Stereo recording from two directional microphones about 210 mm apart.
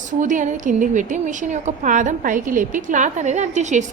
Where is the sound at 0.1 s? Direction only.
40° right (ahead or behind).